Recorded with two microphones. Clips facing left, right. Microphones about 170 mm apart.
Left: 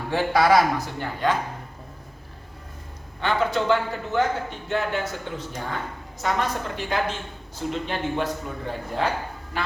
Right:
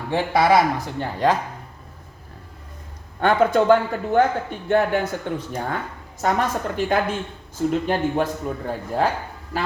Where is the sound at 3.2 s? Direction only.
50° right (ahead or behind).